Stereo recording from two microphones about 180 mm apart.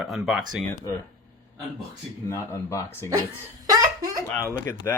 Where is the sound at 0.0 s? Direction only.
5° right (ahead or behind).